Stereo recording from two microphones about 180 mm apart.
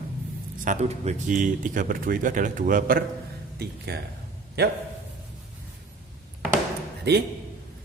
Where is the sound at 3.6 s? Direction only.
65° right (ahead or behind).